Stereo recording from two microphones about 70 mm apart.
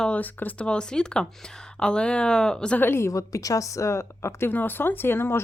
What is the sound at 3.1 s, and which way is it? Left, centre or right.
Speech, left.